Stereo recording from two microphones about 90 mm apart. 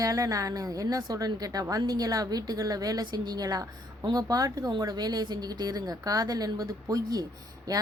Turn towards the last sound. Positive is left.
turn(degrees=-40)  # may be behind; listen again after turning